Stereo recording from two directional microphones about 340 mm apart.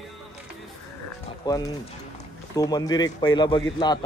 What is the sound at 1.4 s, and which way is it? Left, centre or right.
A man's voice, centre.